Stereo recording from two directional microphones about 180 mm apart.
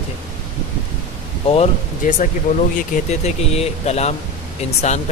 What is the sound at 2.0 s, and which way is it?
Speech, 45° left (ahead or behind).